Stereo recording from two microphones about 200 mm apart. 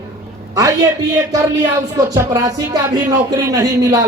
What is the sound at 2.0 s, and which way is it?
Speech, 15° right (ahead or behind).